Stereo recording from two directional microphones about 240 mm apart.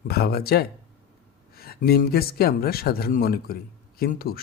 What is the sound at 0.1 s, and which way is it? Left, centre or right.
Speech, left.